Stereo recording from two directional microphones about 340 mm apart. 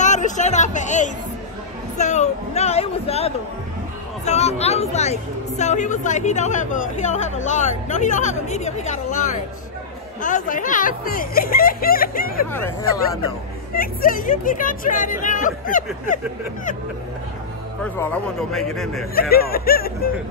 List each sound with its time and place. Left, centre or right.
0.0 s a woman's voice: left
10.2 s a woman's voice: left
12.5 s speech: centre
13.7 s a woman's voice: left
17.9 s speech: centre
19.1 s a woman's voice: left